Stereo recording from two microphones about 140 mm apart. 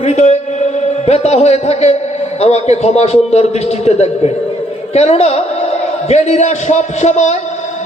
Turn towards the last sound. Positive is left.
turn(degrees=55)  # may be behind; listen again after turning